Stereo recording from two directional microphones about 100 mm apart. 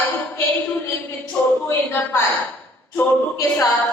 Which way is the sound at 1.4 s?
20° left (ahead or behind).